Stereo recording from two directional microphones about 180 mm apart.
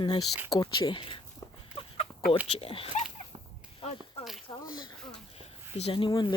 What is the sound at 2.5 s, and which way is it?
Speech, 30° left (ahead or behind).